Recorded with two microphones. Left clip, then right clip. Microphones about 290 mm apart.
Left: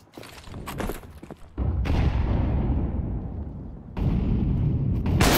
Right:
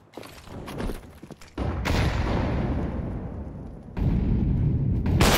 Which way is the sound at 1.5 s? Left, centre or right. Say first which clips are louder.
Right 5 dB; right.